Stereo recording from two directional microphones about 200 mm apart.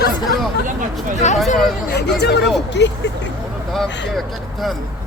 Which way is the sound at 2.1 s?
55° left (ahead or behind).